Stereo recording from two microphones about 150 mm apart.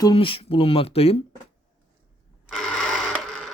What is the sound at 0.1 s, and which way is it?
Speech, 35° left (ahead or behind).